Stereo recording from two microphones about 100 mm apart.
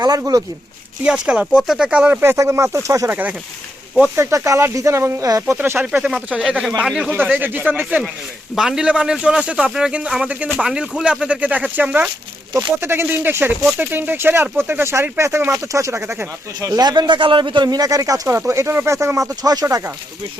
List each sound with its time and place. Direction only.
1.0 s a man's voice: 10° right (ahead or behind)
2.2 s speech: 25° right (ahead or behind)
3.1 s a man's voice: 15° right (ahead or behind)
4.1 s speech: 30° right (ahead or behind)
5.8 s a man's voice: 10° right (ahead or behind)
7.1 s a man's voice: 20° right (ahead or behind)
16.6 s speech: 40° right (ahead or behind)